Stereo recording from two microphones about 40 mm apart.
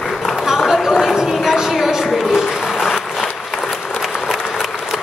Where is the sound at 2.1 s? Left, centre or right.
Centre.